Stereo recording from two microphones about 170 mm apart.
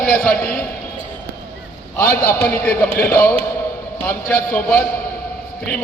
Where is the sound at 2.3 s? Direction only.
10° left (ahead or behind).